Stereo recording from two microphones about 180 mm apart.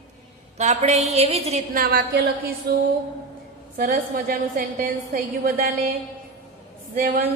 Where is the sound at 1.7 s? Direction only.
55° right (ahead or behind).